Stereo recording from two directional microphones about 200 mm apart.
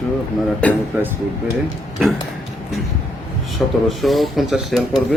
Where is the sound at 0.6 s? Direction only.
5° left (ahead or behind).